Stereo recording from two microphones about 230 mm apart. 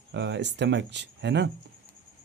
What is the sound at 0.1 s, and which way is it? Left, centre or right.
Speech, right.